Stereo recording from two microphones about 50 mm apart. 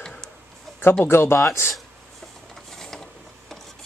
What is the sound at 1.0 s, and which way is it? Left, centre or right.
Speech, left.